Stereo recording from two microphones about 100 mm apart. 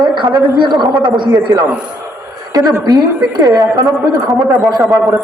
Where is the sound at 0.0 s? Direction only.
50° right (ahead or behind).